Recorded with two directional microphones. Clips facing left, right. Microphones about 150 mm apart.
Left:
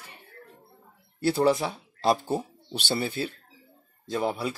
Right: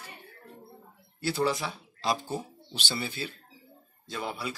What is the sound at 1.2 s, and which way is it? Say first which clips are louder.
Speech: left 6 dB; 55° left (ahead or behind).